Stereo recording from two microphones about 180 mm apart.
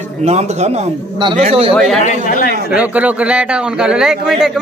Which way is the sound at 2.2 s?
50° left (ahead or behind).